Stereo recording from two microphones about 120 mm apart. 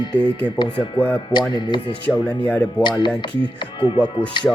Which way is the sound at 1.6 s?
40° left (ahead or behind).